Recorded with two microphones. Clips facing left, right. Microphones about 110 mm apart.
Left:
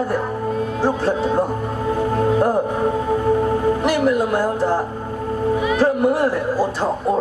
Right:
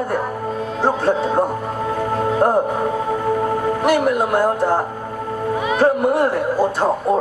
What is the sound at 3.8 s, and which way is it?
Speech, 55° right (ahead or behind).